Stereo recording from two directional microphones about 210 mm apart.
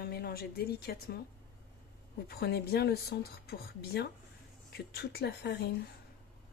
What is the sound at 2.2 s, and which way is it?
Speech, 50° left (ahead or behind).